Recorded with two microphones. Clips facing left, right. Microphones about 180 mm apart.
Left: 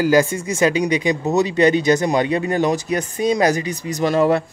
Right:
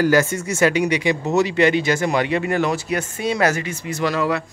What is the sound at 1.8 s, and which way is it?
Speech, 20° left (ahead or behind).